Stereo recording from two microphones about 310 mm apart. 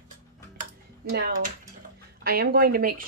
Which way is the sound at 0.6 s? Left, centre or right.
Right.